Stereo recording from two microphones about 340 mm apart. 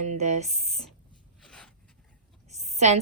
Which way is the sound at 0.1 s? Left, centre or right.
Right.